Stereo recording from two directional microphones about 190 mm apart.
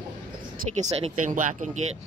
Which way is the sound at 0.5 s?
35° right (ahead or behind).